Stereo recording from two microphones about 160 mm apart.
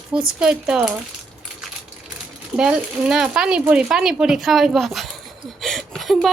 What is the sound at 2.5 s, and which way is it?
Speech, 5° right (ahead or behind).